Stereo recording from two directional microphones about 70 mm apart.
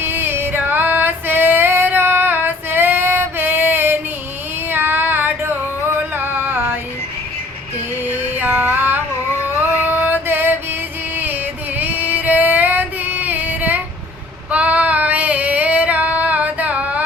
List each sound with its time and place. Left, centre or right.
0.0 s female singing: right
4.7 s a sound: right
8.0 s female singing: right
9.4 s music: right
14.5 s female singing: right